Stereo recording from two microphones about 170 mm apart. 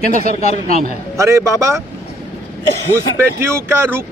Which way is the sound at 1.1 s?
15° right (ahead or behind).